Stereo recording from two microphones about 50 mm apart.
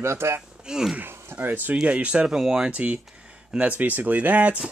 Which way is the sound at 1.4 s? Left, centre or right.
Right.